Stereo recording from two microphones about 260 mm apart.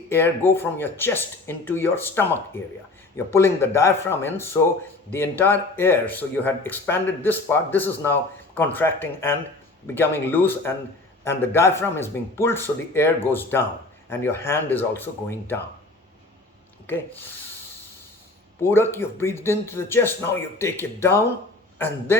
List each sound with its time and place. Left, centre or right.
0.1 s speech: centre
18.6 s a man's voice: centre